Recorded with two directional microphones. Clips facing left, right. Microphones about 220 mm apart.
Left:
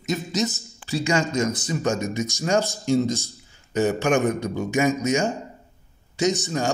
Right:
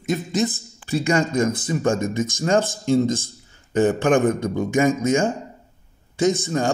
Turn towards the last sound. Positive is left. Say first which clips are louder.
# right 3 dB
turn(degrees=-55)  # may be behind; listen again after turning